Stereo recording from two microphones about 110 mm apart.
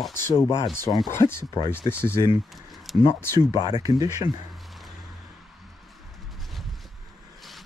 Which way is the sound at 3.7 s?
35° right (ahead or behind).